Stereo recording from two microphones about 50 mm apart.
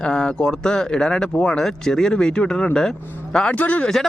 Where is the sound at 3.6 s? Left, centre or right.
Left.